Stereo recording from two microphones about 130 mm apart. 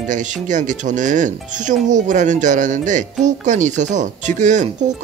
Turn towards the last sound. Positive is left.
turn(degrees=-70)  # may be behind; listen again after turning